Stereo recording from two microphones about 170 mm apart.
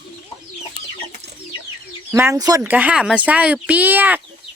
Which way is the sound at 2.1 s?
15° right (ahead or behind).